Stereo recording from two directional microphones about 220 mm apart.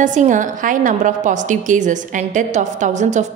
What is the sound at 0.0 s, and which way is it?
A woman's voice, 35° right (ahead or behind).